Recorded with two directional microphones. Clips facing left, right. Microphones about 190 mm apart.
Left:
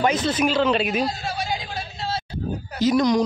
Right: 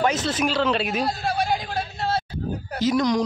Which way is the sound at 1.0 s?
55° right (ahead or behind).